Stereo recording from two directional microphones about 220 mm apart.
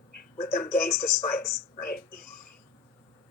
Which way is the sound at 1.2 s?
45° left (ahead or behind).